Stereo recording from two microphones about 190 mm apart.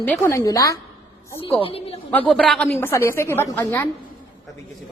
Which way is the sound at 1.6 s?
30° left (ahead or behind).